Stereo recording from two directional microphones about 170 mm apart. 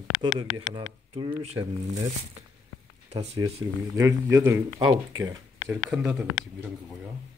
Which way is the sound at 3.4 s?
25° right (ahead or behind).